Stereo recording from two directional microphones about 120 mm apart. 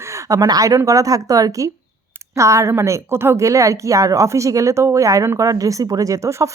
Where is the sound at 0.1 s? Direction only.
30° right (ahead or behind).